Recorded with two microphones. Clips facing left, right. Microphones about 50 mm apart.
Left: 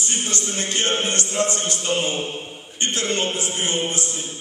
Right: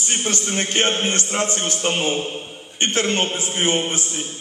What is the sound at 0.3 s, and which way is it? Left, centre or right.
A man's voice, right.